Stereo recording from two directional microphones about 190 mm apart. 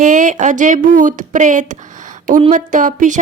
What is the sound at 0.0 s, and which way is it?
Speech, 40° right (ahead or behind).